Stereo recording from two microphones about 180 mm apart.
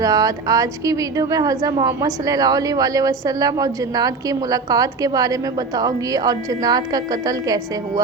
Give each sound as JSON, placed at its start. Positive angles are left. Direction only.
{"t": 0.0, "sound": "a woman's voice", "side_deg": -20}